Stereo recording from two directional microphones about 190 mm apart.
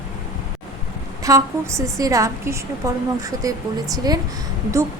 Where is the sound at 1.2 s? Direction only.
15° right (ahead or behind).